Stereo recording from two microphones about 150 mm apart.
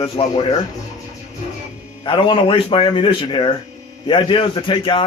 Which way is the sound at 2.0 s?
35° left (ahead or behind).